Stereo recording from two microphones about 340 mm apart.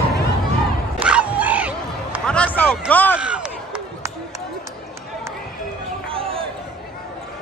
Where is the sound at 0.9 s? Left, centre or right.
Centre.